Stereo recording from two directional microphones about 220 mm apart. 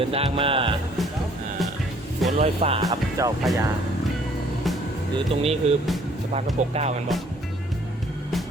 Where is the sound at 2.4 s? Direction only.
25° right (ahead or behind).